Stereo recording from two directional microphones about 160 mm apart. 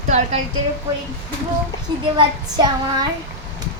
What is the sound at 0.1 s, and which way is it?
Speech, 45° right (ahead or behind).